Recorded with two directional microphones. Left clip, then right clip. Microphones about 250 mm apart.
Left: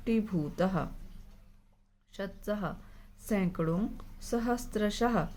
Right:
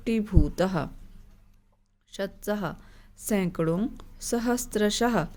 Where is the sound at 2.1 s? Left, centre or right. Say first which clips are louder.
Right 6 dB; right.